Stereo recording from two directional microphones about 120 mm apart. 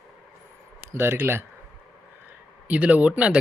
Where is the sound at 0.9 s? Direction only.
20° right (ahead or behind).